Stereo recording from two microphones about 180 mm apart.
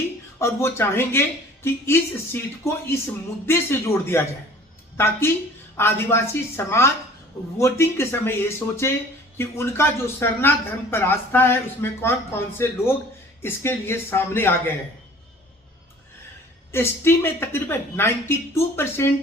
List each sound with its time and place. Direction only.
0.3 s speech: 15° left (ahead or behind)
16.7 s speech: 15° left (ahead or behind)